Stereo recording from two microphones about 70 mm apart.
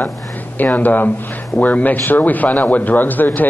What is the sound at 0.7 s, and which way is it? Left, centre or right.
A man's voice, left.